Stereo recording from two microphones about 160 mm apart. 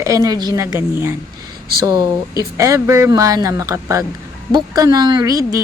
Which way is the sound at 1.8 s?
25° right (ahead or behind).